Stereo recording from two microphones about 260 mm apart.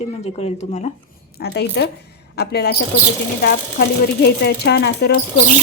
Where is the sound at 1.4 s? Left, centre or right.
Left.